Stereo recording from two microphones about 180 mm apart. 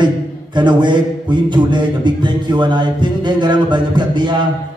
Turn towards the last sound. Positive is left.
turn(degrees=-25)  # may be behind; listen again after turning